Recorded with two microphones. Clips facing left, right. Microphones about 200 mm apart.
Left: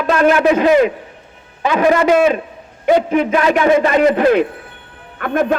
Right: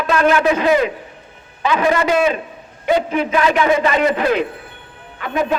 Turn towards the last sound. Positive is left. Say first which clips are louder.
# left 4 dB
turn(degrees=50)  # may be behind; listen again after turning